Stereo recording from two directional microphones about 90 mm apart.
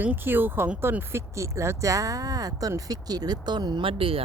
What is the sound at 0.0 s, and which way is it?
Speech, 20° right (ahead or behind).